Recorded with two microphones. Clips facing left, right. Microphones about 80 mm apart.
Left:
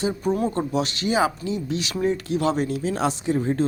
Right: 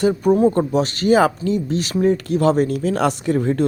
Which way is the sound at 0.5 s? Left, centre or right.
Right.